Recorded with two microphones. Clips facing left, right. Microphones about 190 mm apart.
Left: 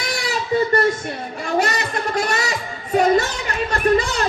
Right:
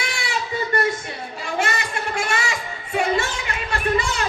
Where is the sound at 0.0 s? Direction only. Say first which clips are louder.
Left 4 dB; 40° left (ahead or behind).